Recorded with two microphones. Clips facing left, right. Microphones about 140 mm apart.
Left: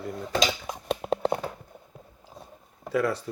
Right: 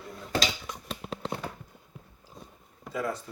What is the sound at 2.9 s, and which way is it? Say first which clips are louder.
Speech: left 6 dB; 70° left (ahead or behind).